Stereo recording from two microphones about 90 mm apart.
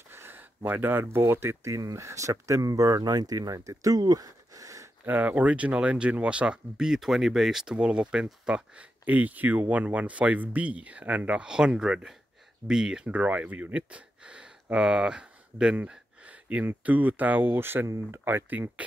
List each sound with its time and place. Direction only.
0.1 s a sound: 25° right (ahead or behind)
0.7 s speech: 25° right (ahead or behind); by 4.8 s 40° right (ahead or behind)
5.0 s speech: 20° right (ahead or behind)
17.8 s speech: 40° right (ahead or behind)
18.2 s speech: 20° right (ahead or behind)